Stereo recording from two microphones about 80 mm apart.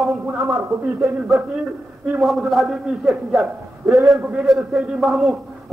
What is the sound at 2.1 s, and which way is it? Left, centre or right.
A man's voice, centre.